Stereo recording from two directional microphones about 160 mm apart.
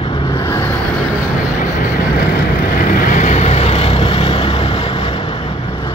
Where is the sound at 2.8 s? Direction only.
60° left (ahead or behind); by 5.2 s 35° left (ahead or behind).